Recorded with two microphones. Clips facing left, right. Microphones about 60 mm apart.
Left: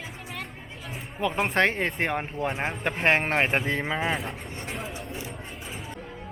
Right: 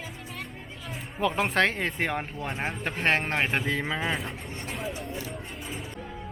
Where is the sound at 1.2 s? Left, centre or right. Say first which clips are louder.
Even; centre.